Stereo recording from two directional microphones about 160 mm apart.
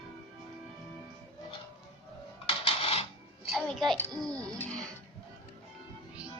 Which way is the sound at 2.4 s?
35° left (ahead or behind).